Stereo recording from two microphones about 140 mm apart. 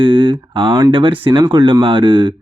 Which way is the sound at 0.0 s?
35° right (ahead or behind).